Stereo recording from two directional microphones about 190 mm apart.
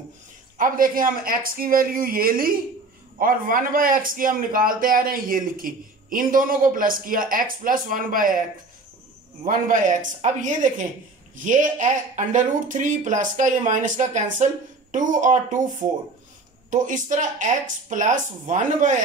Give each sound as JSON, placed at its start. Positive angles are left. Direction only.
{"t": 0.6, "sound": "a man's voice", "side_deg": -45}
{"t": 9.4, "sound": "a man's voice", "side_deg": -45}
{"t": 16.7, "sound": "speech", "side_deg": -40}